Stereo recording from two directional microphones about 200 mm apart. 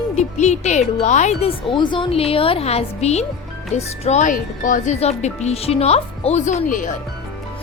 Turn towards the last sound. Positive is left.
turn(degrees=40)  # may be behind; listen again after turning